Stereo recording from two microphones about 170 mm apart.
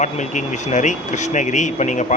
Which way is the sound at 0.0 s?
45° left (ahead or behind).